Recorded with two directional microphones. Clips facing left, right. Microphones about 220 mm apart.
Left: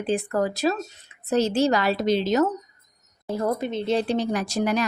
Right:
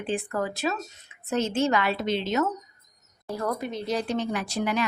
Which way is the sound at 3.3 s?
25° left (ahead or behind).